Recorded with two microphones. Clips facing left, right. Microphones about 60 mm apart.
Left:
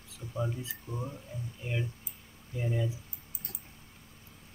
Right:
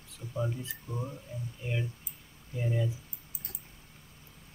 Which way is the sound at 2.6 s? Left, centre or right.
Centre.